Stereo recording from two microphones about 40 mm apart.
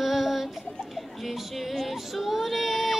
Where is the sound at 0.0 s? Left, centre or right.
Centre.